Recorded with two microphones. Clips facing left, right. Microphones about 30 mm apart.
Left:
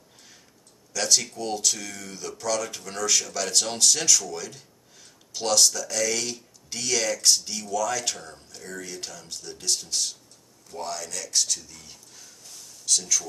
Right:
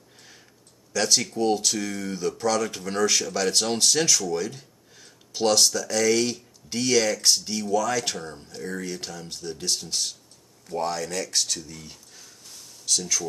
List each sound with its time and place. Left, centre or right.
0.9 s speech: centre